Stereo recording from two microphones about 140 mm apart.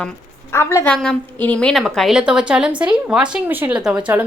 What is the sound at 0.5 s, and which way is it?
A woman's voice, 20° left (ahead or behind).